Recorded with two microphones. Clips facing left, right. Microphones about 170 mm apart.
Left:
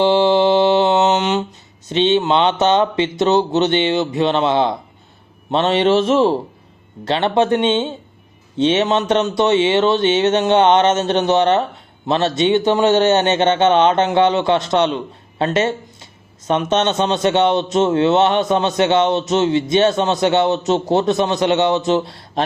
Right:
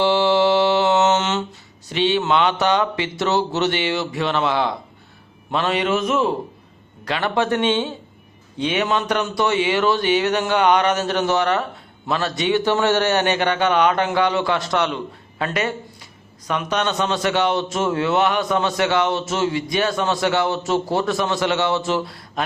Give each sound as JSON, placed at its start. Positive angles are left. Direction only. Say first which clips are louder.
{"t": 0.0, "sound": "mantra", "louder": "left 3 dB", "side_deg": 20}
{"t": 1.9, "sound": "a man's voice", "louder": "left 4 dB", "side_deg": 20}